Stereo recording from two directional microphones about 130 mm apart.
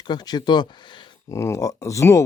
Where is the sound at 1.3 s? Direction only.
20° left (ahead or behind).